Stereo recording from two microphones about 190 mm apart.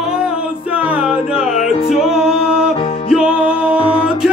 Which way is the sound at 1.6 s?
30° left (ahead or behind).